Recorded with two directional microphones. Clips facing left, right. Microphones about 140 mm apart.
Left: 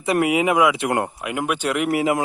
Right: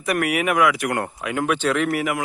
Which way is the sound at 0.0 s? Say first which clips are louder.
Left 3 dB; 25° left (ahead or behind).